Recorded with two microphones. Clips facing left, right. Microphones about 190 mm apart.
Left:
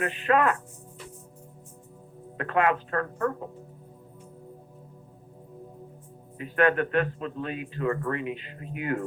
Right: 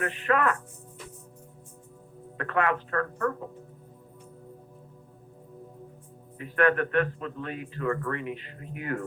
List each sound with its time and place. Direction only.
0.0 s a man's voice: 20° left (ahead or behind)
2.4 s a man's voice: 20° left (ahead or behind)
6.3 s a man's voice: 20° left (ahead or behind)